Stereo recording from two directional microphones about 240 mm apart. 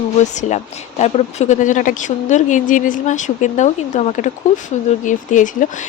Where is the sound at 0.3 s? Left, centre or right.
Left.